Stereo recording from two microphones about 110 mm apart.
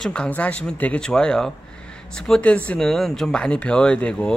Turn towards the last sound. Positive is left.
turn(degrees=10)  # may be behind; listen again after turning